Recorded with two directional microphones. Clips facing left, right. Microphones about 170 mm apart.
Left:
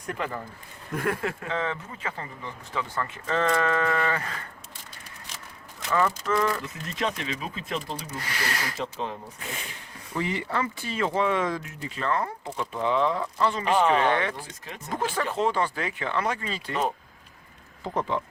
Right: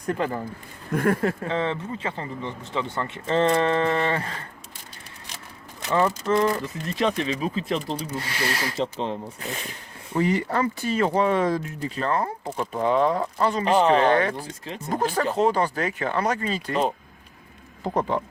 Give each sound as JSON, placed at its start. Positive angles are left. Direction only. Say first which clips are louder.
{"t": 0.9, "sound": "speech", "louder": "right 6 dB", "side_deg": -45}
{"t": 5.9, "sound": "speech", "louder": "right 3 dB", "side_deg": -30}
{"t": 10.1, "sound": "speech", "louder": "right 6 dB", "side_deg": -40}
{"t": 14.6, "sound": "speech", "louder": "right 4 dB", "side_deg": -30}
{"t": 17.8, "sound": "speech", "louder": "right 4 dB", "side_deg": -45}